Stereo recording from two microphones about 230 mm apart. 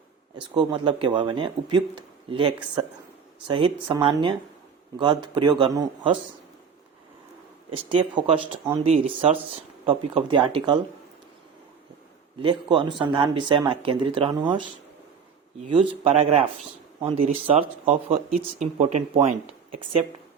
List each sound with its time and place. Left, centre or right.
0.5 s speech: centre
7.9 s speech: right
8.8 s speech: right
12.4 s speech: right
15.9 s speech: right